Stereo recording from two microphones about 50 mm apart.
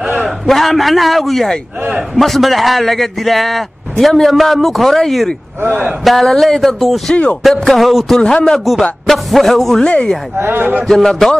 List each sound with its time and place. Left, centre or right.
0.5 s a man's voice: centre
8.2 s speech: left
8.7 s a man's voice: centre
9.8 s speech: centre
10.3 s a man's voice: right
10.9 s a man's voice: centre